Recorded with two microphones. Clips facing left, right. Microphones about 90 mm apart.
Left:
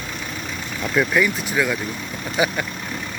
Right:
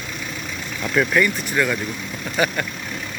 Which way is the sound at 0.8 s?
5° left (ahead or behind).